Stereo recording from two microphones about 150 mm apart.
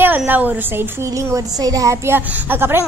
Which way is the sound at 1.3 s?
25° right (ahead or behind).